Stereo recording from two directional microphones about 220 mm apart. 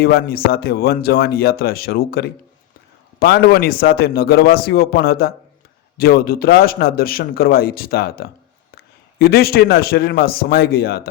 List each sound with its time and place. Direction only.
0.0 s a man's voice: 45° left (ahead or behind)